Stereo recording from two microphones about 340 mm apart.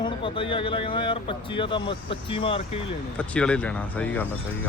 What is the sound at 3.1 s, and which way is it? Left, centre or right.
Speech, centre.